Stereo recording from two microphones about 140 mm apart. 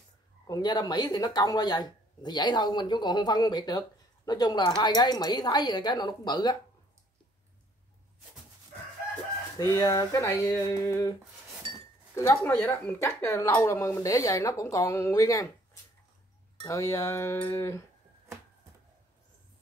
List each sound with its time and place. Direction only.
0.5 s speech: 30° left (ahead or behind)
9.6 s speech: 25° left (ahead or behind)
12.2 s speech: 20° left (ahead or behind)
16.6 s speech: 25° left (ahead or behind)